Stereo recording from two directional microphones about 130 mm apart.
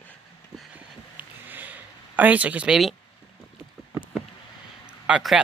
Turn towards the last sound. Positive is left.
turn(degrees=-5)  # may be behind; listen again after turning